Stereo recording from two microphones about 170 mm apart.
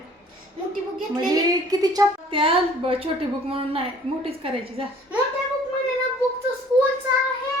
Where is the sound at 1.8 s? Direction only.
20° right (ahead or behind).